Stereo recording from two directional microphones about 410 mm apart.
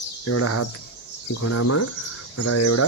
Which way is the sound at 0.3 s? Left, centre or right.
Left.